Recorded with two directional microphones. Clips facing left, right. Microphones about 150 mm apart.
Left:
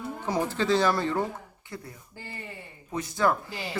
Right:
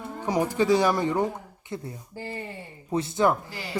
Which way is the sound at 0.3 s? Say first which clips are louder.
Right 4 dB; 15° right (ahead or behind).